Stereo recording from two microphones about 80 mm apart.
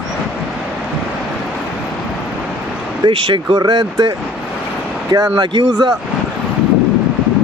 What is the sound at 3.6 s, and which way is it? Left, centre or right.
Speech, right.